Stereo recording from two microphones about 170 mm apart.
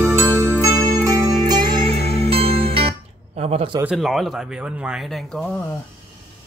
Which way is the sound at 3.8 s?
Centre (ahead or behind).